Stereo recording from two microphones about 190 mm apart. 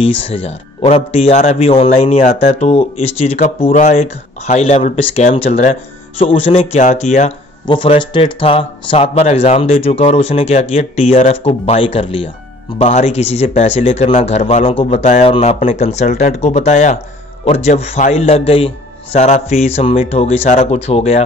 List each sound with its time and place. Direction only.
0.0 s a man's voice: 30° left (ahead or behind)
7.6 s a man's voice: 25° left (ahead or behind)